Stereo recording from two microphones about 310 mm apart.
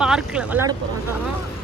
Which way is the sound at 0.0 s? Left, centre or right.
Centre.